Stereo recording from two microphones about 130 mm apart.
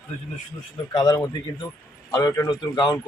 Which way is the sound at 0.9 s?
30° left (ahead or behind).